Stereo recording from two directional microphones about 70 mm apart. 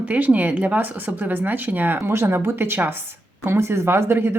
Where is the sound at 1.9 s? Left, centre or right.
Right.